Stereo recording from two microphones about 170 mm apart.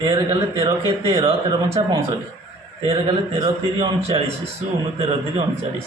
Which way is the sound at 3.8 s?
30° right (ahead or behind).